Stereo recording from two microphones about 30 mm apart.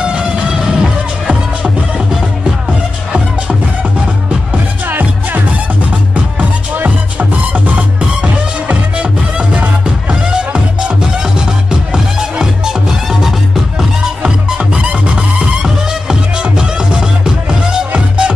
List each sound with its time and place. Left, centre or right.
0.0 s music: right
0.5 s music: right
4.8 s music: right
10.3 s music: right
11.9 s music: centre
15.6 s music: right